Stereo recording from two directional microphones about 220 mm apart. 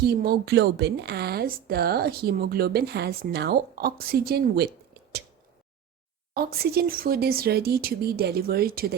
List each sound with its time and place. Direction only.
0.0 s a woman's voice: 45° right (ahead or behind)
6.3 s a woman's voice: 45° right (ahead or behind)